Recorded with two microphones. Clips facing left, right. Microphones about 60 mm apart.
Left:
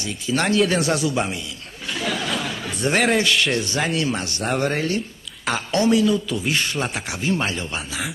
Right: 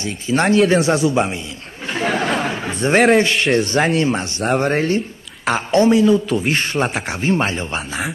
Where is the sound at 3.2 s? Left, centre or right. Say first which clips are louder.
Right 4 dB; right.